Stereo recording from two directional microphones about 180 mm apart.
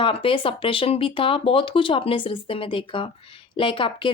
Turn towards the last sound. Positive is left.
turn(degrees=30)  # may be behind; listen again after turning